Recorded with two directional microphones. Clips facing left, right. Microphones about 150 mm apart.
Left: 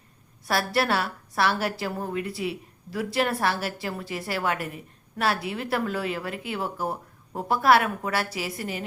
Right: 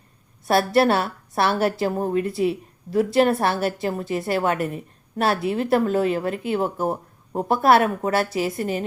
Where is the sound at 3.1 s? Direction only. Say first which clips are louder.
Right 5 dB; 25° right (ahead or behind).